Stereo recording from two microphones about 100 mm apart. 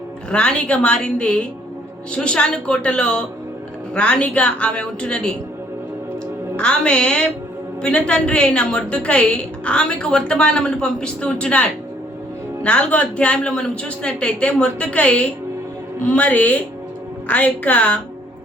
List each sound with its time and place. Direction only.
0.3 s a woman's voice: 10° left (ahead or behind)
6.6 s a woman's voice: 10° left (ahead or behind)
12.6 s a woman's voice: 15° left (ahead or behind)